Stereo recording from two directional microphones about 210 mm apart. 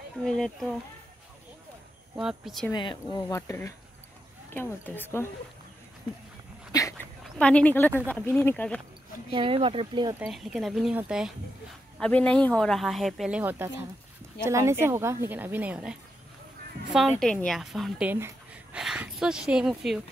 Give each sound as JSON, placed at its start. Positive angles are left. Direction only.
{"t": 0.2, "sound": "speech", "side_deg": 5}
{"t": 2.1, "sound": "speech", "side_deg": 0}
{"t": 2.7, "sound": "speech", "side_deg": 20}
{"t": 6.7, "sound": "dog", "side_deg": 15}
{"t": 7.3, "sound": "speech", "side_deg": 5}
{"t": 9.3, "sound": "speech", "side_deg": -25}
{"t": 10.1, "sound": "speech", "side_deg": -5}
{"t": 17.2, "sound": "speech", "side_deg": 5}